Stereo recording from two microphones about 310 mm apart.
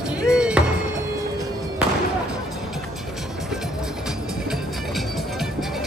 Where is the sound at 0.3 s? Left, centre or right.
Centre.